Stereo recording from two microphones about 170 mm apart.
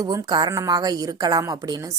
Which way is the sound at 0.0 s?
25° right (ahead or behind).